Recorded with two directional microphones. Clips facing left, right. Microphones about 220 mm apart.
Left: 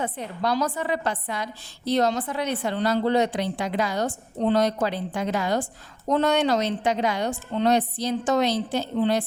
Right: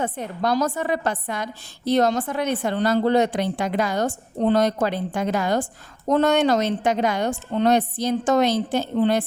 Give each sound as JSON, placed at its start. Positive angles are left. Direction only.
{"t": 0.0, "sound": "a woman's voice", "side_deg": -45}